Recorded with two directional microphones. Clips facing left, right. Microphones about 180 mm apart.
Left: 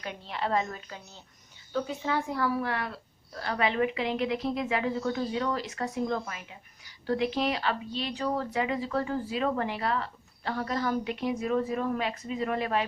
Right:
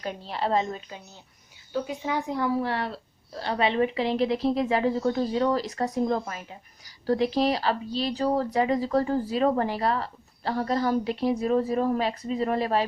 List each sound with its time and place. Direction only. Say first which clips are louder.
0.0 s a woman's voice: right 4 dB; 35° right (ahead or behind)